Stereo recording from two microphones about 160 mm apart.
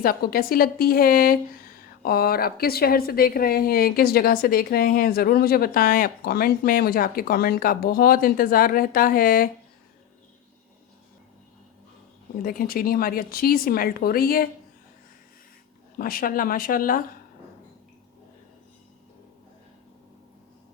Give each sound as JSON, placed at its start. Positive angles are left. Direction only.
{"t": 0.0, "sound": "a woman's voice", "side_deg": 65}
{"t": 12.4, "sound": "a woman's voice", "side_deg": 65}
{"t": 16.0, "sound": "speech", "side_deg": 65}